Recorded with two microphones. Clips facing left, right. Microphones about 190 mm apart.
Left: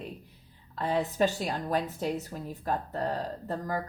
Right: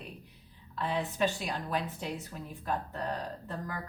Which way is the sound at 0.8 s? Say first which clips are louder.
Left 4 dB; 40° left (ahead or behind).